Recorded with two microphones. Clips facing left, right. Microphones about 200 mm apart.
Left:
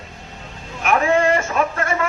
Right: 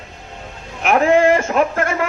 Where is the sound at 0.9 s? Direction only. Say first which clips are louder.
Right 3 dB; 55° right (ahead or behind).